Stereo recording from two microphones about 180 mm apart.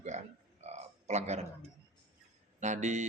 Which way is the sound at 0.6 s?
40° right (ahead or behind).